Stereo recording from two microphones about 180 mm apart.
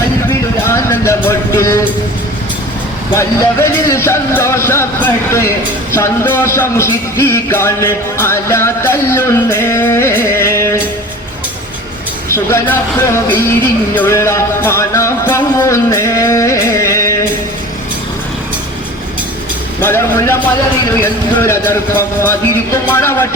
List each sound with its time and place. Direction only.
0.7 s a sound: 15° left (ahead or behind)
3.2 s a man's voice: 15° left (ahead or behind)
12.3 s a man's voice: 15° left (ahead or behind)
13.9 s a man's voice: 15° left (ahead or behind)
19.8 s a man's voice: 15° left (ahead or behind)